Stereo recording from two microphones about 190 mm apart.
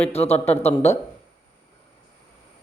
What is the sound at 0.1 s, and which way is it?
Speech, 35° left (ahead or behind).